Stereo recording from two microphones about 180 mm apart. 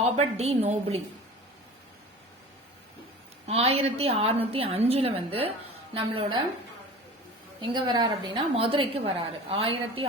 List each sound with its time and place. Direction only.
0.0 s a woman's voice: 35° right (ahead or behind)
3.4 s a woman's voice: 35° right (ahead or behind)
7.7 s a woman's voice: 25° right (ahead or behind)